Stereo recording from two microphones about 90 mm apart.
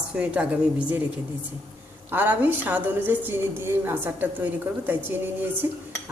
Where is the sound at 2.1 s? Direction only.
20° right (ahead or behind).